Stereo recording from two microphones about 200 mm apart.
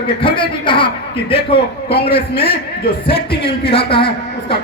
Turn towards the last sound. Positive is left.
turn(degrees=25)  # may be behind; listen again after turning